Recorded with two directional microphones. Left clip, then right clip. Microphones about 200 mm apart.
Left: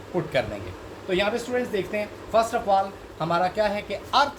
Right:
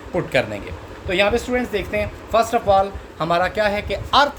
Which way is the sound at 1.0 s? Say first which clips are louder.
Right 6 dB; 55° right (ahead or behind).